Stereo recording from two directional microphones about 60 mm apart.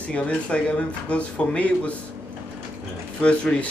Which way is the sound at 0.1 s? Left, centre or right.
Centre.